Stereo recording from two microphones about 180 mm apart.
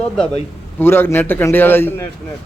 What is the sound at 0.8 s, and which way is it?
A man's voice, 10° left (ahead or behind).